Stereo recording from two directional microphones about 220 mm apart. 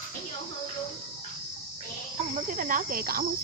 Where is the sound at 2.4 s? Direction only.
35° right (ahead or behind).